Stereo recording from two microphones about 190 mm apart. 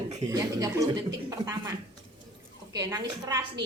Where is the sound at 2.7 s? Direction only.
20° right (ahead or behind).